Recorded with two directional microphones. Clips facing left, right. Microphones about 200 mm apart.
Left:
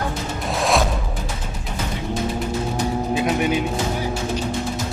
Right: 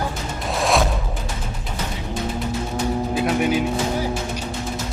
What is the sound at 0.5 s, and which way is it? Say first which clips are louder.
Music: even; centre (ahead or behind).